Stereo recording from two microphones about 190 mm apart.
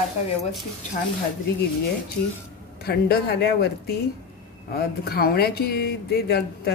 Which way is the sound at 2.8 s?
55° left (ahead or behind).